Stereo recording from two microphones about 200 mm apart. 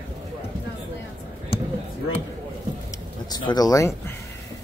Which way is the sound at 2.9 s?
20° left (ahead or behind).